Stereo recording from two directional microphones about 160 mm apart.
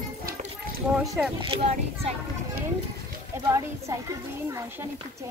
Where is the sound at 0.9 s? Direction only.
Centre (ahead or behind).